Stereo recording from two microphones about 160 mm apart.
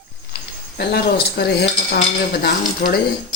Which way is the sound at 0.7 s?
80° left.